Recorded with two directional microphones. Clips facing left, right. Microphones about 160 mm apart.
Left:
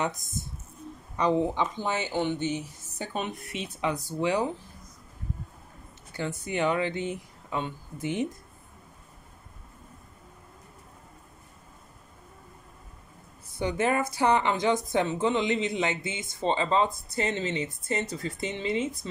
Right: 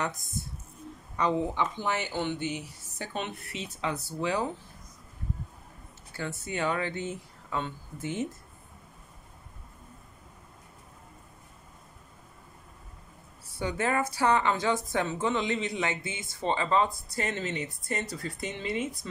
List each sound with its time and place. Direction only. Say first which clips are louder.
1.1 s speech: left 3 dB; 15° left (ahead or behind)
6.1 s speech: left 4 dB; 20° left (ahead or behind)
13.5 s speech: left 3 dB; 20° left (ahead or behind)